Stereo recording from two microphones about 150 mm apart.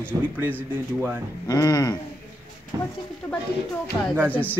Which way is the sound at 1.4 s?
25° left (ahead or behind).